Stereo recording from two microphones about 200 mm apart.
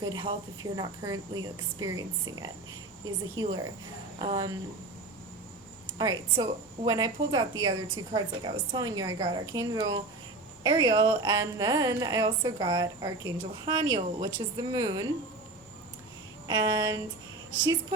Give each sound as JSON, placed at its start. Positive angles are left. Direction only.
{"t": 0.0, "sound": "a woman's voice", "side_deg": -20}
{"t": 6.0, "sound": "a woman's voice", "side_deg": -20}
{"t": 16.5, "sound": "a woman's voice", "side_deg": -20}